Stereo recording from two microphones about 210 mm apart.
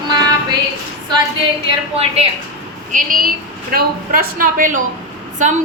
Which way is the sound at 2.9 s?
40° right (ahead or behind).